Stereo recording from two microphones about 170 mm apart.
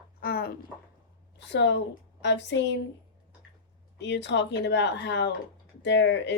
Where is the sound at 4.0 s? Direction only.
90° left.